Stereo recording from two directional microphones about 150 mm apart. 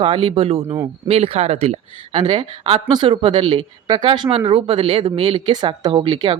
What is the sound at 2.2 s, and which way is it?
Speech, 30° right (ahead or behind).